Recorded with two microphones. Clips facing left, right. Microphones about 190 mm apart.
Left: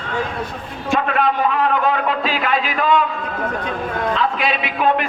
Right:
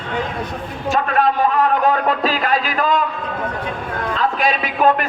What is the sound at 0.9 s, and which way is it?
A man's voice, 40° right (ahead or behind).